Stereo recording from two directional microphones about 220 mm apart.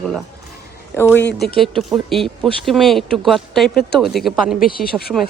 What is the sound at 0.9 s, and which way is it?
Speech, 10° left (ahead or behind).